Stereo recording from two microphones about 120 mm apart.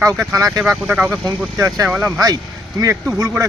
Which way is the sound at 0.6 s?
5° right (ahead or behind).